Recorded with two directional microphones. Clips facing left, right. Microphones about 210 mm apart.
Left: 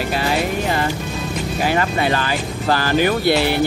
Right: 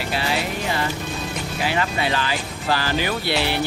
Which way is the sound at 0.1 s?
45° left (ahead or behind).